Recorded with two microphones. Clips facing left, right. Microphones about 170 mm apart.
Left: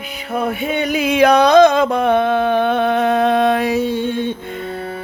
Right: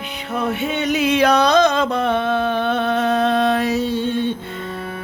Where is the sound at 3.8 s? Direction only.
55° left (ahead or behind).